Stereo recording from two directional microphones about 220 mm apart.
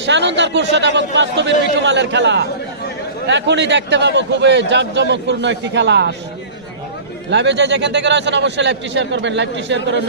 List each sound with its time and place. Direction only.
0.0 s a man's voice: 55° right (ahead or behind)
7.2 s a man's voice: 50° right (ahead or behind)